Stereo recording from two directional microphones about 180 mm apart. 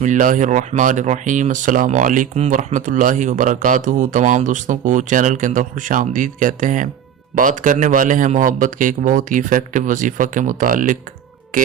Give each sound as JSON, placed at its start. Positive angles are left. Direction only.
{"t": 0.0, "sound": "speech", "side_deg": -45}